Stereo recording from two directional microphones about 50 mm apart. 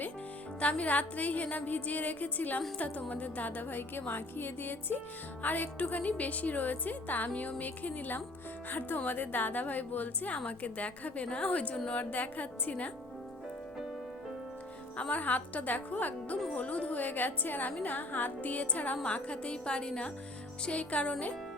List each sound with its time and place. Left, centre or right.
0.6 s a woman's voice: left
15.1 s a woman's voice: left